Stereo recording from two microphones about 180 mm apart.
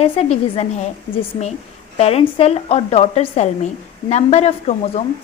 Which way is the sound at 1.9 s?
35° left (ahead or behind).